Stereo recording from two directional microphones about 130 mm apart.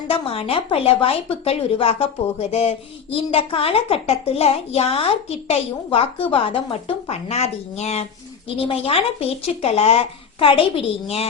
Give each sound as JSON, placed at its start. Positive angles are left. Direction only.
{"t": 0.1, "sound": "speech", "side_deg": 45}